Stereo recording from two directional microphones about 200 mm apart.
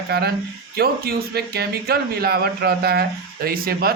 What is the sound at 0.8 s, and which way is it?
Speech, 50° right (ahead or behind).